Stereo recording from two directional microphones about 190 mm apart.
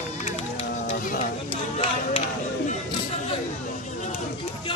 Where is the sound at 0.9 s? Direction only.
35° left (ahead or behind).